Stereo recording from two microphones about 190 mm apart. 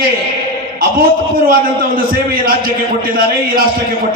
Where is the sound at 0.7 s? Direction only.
50° right (ahead or behind).